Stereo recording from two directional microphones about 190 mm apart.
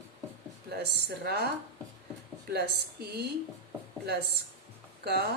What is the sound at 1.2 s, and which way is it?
Speech, 60° right (ahead or behind).